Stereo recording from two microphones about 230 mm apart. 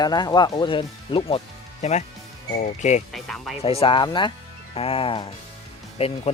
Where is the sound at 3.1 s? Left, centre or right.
Centre.